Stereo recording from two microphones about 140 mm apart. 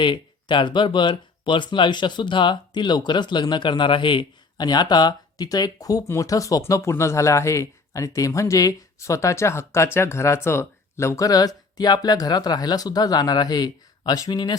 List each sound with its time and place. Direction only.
0.0 s speech: 35° left (ahead or behind)